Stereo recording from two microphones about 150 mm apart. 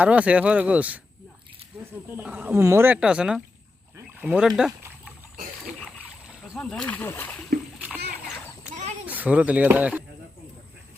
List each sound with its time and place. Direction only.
0.0 s speech: 10° right (ahead or behind)
2.0 s speech: 15° right (ahead or behind)
3.9 s a sound: 15° right (ahead or behind)
4.4 s speech: centre (ahead or behind)
6.0 s rowboat: 5° right (ahead or behind); by 7.4 s 15° left (ahead or behind)
7.8 s splash: 10° right (ahead or behind)
8.7 s a sound: 50° right (ahead or behind)
9.0 s speech: 10° right (ahead or behind)